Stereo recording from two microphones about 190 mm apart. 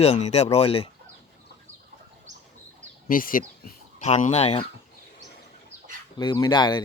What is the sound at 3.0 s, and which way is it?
Speech, 50° left (ahead or behind).